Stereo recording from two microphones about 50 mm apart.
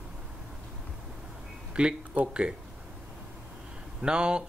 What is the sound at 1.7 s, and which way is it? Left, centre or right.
Speech, centre.